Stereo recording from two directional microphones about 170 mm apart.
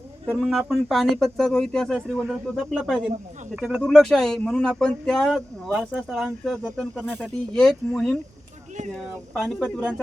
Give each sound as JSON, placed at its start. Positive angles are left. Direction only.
{"t": 0.3, "sound": "speech", "side_deg": 0}